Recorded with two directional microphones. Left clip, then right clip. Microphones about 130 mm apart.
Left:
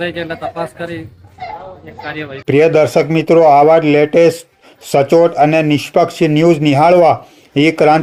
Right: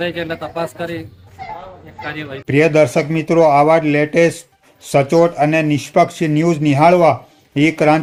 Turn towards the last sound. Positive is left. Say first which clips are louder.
# left 3 dB
turn(degrees=15)  # may be behind; listen again after turning